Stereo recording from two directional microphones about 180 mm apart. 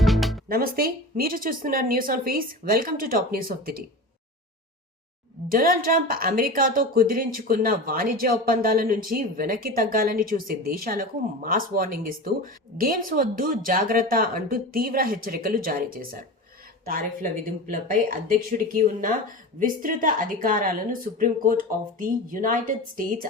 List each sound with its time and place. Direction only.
0.0 s music: centre (ahead or behind)
0.4 s speech: 55° right (ahead or behind)
5.5 s speech: 50° right (ahead or behind)
17.7 s speech: 50° right (ahead or behind)